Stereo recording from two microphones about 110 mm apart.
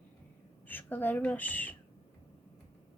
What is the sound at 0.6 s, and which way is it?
Speech, 15° left (ahead or behind).